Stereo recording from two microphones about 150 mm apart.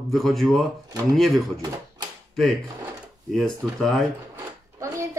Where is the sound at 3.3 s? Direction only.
5° left (ahead or behind).